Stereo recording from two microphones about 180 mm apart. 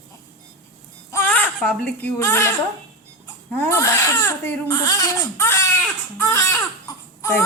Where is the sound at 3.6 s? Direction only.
15° left (ahead or behind).